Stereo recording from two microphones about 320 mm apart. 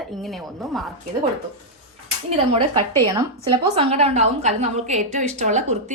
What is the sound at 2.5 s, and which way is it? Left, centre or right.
A woman's voice, centre.